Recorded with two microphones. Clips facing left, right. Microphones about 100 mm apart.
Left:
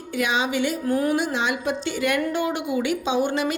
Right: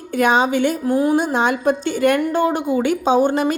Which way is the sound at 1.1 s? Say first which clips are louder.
Right 6 dB; 45° right (ahead or behind).